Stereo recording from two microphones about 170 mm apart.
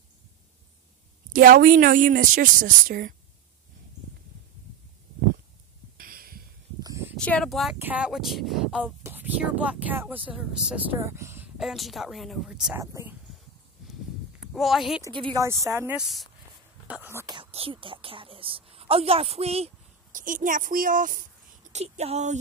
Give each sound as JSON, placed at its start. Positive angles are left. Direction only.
{"t": 1.3, "sound": "a woman's voice", "side_deg": -55}
{"t": 5.9, "sound": "heart sounds", "side_deg": -60}
{"t": 6.8, "sound": "a sound", "side_deg": -15}
{"t": 7.2, "sound": "speech", "side_deg": 5}
{"t": 11.0, "sound": "speech", "side_deg": -15}
{"t": 11.5, "sound": "speech", "side_deg": 0}
{"t": 12.8, "sound": "speech", "side_deg": -15}
{"t": 14.4, "sound": "speech", "side_deg": 0}
{"t": 15.3, "sound": "speech", "side_deg": -20}
{"t": 16.0, "sound": "speech", "side_deg": 0}
{"t": 17.4, "sound": "a woman's voice", "side_deg": -35}
{"t": 20.1, "sound": "a woman's voice", "side_deg": -50}
{"t": 21.7, "sound": "a woman's voice", "side_deg": -40}